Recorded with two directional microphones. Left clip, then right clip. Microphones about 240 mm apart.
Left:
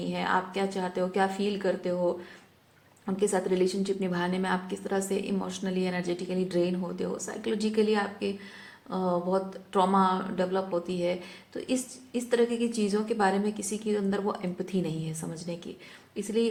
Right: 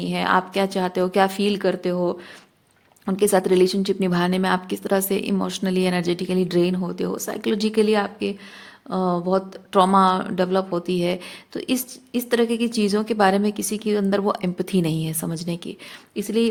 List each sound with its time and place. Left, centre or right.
0.0 s speech: right